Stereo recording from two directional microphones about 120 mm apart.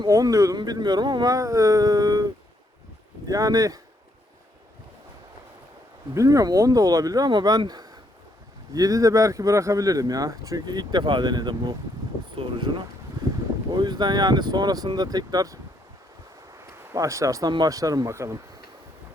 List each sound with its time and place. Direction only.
0.1 s speech: 25° right (ahead or behind)
6.1 s speech: 30° right (ahead or behind)
16.6 s a sound: 25° right (ahead or behind)
17.5 s speech: 30° right (ahead or behind)